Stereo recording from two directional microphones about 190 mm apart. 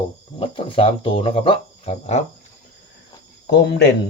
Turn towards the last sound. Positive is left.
turn(degrees=60)  # may be behind; listen again after turning